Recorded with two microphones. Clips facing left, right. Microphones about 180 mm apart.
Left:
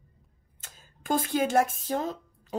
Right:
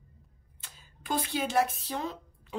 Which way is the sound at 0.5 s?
45° left (ahead or behind).